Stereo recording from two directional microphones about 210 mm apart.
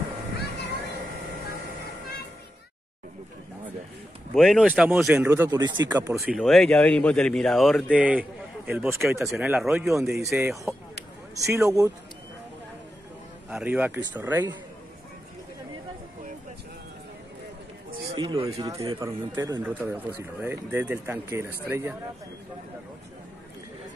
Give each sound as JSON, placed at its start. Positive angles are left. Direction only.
{"t": 4.4, "sound": "speech", "side_deg": 0}
{"t": 6.1, "sound": "speech", "side_deg": 0}
{"t": 13.5, "sound": "speech", "side_deg": -5}
{"t": 18.1, "sound": "speech", "side_deg": -25}